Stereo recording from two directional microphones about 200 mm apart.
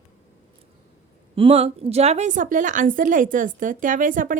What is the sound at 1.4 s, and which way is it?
A woman's voice, 30° right (ahead or behind).